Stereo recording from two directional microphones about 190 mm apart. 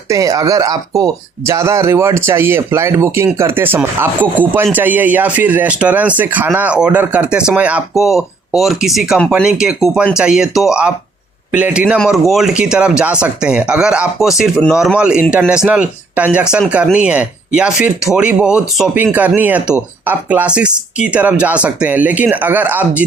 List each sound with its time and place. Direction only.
0.1 s speech: 15° right (ahead or behind)